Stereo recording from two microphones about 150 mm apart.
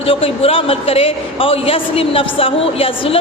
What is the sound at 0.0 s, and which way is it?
A woman's voice, 40° left (ahead or behind).